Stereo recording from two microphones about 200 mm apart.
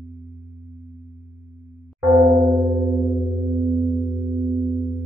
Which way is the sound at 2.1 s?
Centre (ahead or behind).